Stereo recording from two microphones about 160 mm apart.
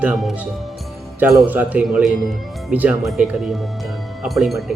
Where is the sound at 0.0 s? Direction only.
Centre (ahead or behind).